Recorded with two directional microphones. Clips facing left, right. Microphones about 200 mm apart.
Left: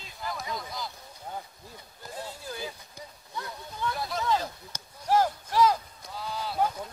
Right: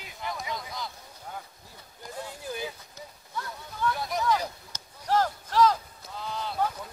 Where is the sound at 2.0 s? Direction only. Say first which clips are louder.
Right 2 dB; 15° right (ahead or behind).